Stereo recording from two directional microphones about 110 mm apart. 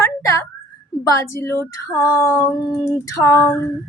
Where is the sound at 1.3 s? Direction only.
25° left (ahead or behind).